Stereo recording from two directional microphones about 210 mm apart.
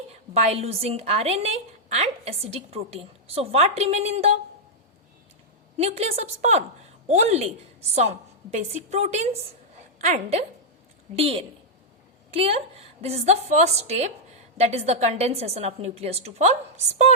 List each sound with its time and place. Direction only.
0.1 s a woman's voice: 30° right (ahead or behind)
5.7 s a woman's voice: 30° right (ahead or behind)
14.6 s a woman's voice: 30° right (ahead or behind)